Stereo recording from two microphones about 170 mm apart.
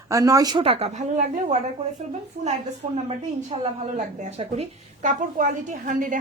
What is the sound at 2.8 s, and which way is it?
A woman's voice, 45° right (ahead or behind).